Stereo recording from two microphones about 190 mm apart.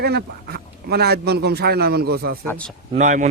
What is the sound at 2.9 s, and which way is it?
Speech, 40° right (ahead or behind).